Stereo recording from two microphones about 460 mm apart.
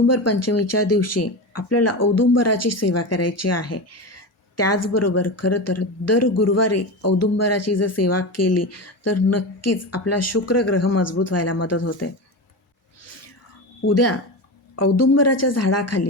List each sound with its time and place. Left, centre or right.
0.1 s speech: left
13.8 s speech: left